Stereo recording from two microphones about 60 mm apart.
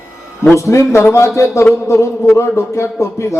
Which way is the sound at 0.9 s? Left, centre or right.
Left.